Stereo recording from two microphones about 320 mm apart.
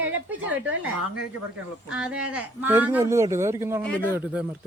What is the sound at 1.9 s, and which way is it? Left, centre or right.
A woman's voice, centre.